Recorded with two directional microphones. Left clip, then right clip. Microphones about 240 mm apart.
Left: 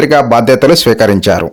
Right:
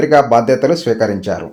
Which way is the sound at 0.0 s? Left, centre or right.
Left.